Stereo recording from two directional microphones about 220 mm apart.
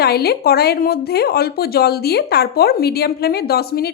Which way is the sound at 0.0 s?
45° left (ahead or behind).